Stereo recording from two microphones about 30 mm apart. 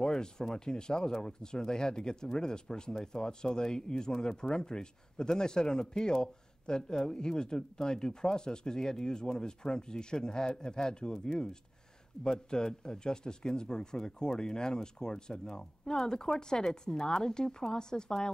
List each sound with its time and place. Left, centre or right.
0.0 s speech: left